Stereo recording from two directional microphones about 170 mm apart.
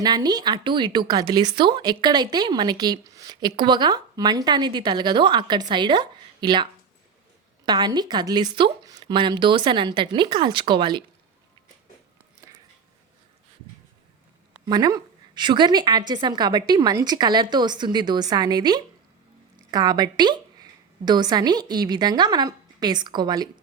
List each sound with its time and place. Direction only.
0.0 s a woman's voice: 25° right (ahead or behind)
12.4 s a sound: 20° right (ahead or behind)
14.7 s a woman's voice: 25° right (ahead or behind)